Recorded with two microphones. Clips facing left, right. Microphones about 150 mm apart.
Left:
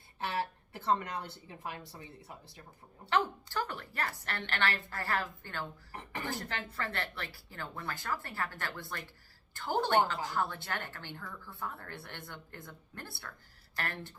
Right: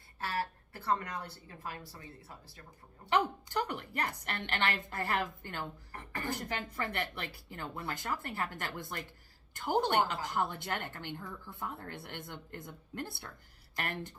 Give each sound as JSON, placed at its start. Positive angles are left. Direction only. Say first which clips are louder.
{"t": 0.2, "sound": "a woman's voice", "louder": "left 1 dB", "side_deg": 20}
{"t": 3.1, "sound": "a woman's voice", "louder": "right 1 dB", "side_deg": -15}